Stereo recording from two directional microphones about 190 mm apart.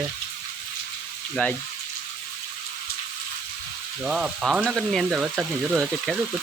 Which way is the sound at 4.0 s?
5° right (ahead or behind).